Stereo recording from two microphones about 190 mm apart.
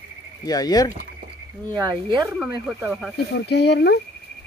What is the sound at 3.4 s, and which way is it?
Speech, 60° left (ahead or behind).